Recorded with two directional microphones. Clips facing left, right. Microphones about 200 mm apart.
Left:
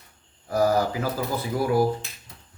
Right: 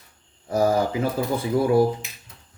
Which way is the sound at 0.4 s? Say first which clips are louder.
Right 1 dB; 25° right (ahead or behind).